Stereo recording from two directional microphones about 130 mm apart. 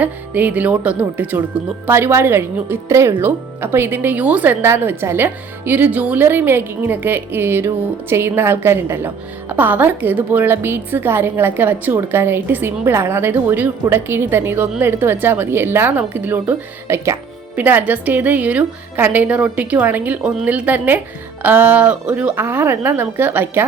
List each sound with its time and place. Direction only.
0.0 s a woman's voice: 10° right (ahead or behind)